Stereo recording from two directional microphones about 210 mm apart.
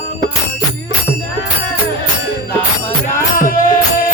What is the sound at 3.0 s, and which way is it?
Music, 40° left (ahead or behind).